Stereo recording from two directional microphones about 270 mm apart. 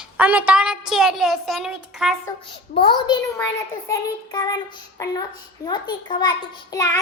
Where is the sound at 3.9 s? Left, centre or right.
Centre.